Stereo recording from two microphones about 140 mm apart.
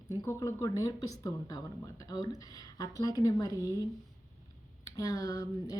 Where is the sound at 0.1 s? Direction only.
20° left (ahead or behind).